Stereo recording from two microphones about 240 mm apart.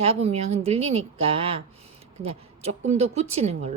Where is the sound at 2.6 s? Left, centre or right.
Right.